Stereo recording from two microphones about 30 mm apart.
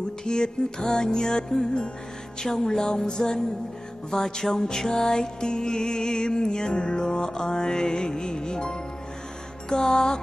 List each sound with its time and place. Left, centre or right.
0.2 s music: left